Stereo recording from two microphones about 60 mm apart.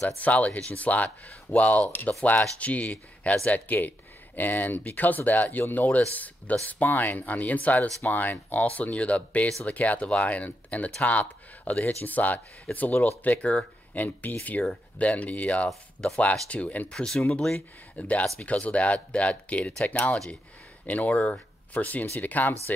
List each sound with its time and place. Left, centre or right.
0.2 s speech: left
17.0 s speech: centre; by 22.8 s left